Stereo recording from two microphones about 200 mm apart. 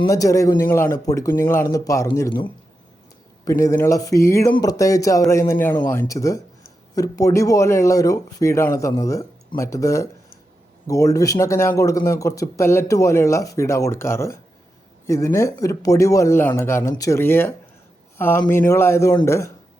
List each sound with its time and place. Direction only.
0.1 s speech: 15° left (ahead or behind)
3.6 s speech: 15° left (ahead or behind)